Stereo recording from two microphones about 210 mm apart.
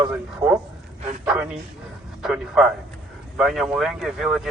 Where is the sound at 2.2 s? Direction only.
Centre (ahead or behind).